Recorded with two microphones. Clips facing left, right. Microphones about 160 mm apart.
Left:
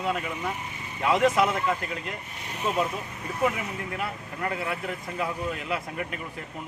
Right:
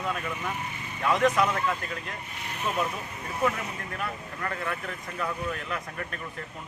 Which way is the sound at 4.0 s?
15° left (ahead or behind).